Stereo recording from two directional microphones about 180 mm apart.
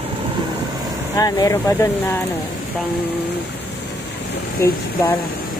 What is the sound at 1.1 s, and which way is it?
Speech, 20° left (ahead or behind).